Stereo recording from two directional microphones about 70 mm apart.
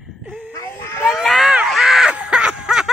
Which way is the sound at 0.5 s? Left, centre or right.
Left.